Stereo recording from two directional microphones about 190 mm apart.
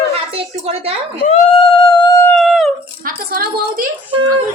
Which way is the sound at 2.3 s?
Centre (ahead or behind).